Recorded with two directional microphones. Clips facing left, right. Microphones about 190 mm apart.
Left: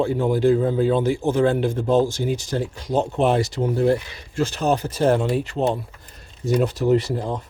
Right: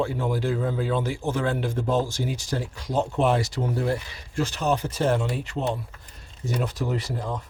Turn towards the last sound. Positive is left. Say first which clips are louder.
# left 8 dB
turn(degrees=25)  # may be behind; listen again after turning